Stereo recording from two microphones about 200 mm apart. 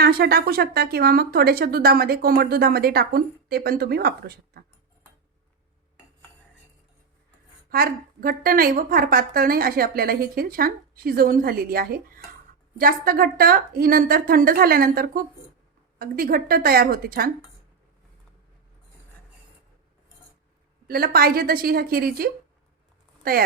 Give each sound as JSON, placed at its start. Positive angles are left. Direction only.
{"t": 0.0, "sound": "a woman's voice", "side_deg": -55}
{"t": 7.7, "sound": "a woman's voice", "side_deg": -50}
{"t": 20.8, "sound": "a woman's voice", "side_deg": -50}